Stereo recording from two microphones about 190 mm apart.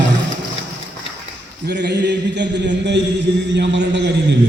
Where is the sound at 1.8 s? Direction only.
60° right (ahead or behind).